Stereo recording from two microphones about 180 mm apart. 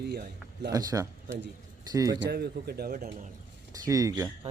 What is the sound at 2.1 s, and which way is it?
Speech, 70° right (ahead or behind).